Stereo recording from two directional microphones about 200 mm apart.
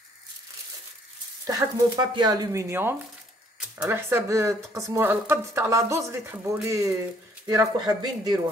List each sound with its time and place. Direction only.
1.4 s speech: 20° right (ahead or behind)